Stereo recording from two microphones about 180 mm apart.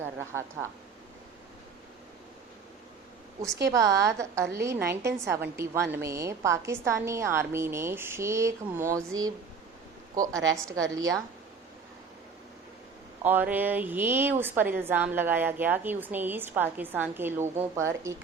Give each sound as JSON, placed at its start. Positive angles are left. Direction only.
{"t": 0.0, "sound": "a woman's voice", "side_deg": -15}
{"t": 3.7, "sound": "a woman's voice", "side_deg": -15}
{"t": 10.5, "sound": "a woman's voice", "side_deg": -15}
{"t": 13.2, "sound": "a woman's voice", "side_deg": -10}